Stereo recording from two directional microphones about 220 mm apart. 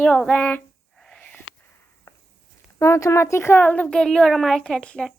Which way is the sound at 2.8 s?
15° left (ahead or behind).